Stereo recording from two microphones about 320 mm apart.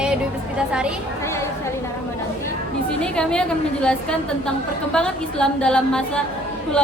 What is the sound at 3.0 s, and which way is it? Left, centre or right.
A woman's voice, centre.